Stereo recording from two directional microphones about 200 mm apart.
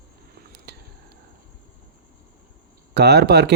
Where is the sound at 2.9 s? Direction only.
55° right (ahead or behind).